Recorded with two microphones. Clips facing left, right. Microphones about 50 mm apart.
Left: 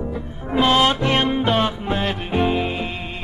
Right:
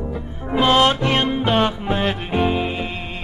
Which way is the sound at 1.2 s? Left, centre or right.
Centre.